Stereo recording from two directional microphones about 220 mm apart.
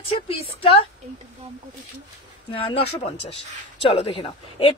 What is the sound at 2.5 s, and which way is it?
Speech, 25° left (ahead or behind).